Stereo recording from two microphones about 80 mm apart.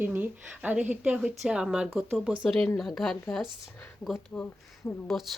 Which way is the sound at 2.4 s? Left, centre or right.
Centre.